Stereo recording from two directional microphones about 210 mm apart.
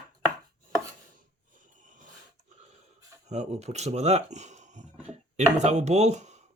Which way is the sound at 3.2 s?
35° right (ahead or behind).